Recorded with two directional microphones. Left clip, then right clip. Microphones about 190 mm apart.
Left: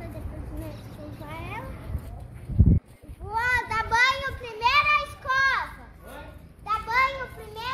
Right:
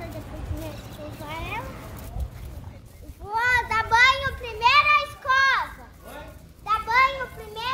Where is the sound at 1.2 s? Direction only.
5° left (ahead or behind).